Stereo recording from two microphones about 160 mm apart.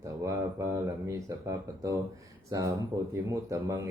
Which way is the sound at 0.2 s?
20° right (ahead or behind).